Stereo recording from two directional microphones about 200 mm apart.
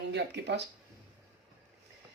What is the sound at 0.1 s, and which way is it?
Speech, 55° right (ahead or behind).